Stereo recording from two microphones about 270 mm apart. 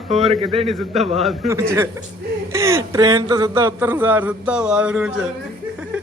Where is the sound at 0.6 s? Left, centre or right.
Centre.